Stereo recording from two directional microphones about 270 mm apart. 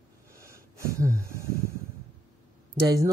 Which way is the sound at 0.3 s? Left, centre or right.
Centre.